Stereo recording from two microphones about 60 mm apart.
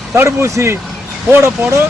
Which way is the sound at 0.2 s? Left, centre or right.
Right.